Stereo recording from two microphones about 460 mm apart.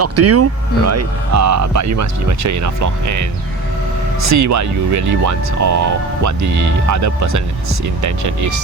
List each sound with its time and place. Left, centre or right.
0.0 s speech: right